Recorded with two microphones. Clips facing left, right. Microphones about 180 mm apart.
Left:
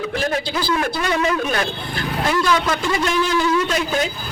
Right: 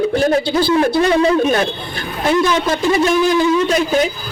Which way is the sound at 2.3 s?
20° right (ahead or behind).